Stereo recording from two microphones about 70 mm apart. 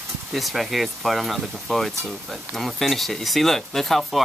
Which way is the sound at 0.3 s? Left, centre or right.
Centre.